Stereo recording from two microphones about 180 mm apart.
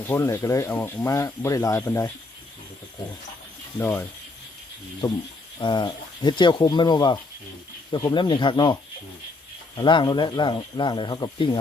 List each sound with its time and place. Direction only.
0.0 s speech: 10° left (ahead or behind)
3.8 s speech: 10° left (ahead or behind)
5.5 s speech: 25° left (ahead or behind)